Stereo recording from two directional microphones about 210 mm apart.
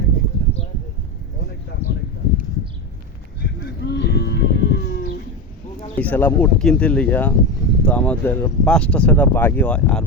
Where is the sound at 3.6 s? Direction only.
55° left (ahead or behind).